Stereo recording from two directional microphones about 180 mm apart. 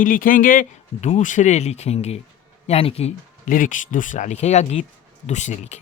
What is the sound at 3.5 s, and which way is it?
Speech, 45° left (ahead or behind).